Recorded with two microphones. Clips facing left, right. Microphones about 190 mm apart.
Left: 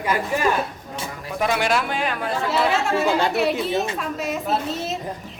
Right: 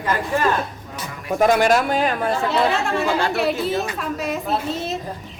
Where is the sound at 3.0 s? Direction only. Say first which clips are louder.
Left 1 dB; centre (ahead or behind).